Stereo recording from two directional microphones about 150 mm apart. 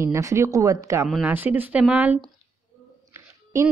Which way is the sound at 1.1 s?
10° right (ahead or behind).